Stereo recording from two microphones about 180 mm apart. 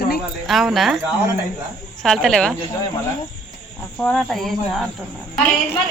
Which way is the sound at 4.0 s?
5° left (ahead or behind).